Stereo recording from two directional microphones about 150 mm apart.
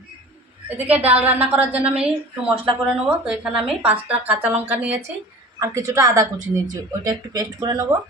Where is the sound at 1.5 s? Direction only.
10° right (ahead or behind).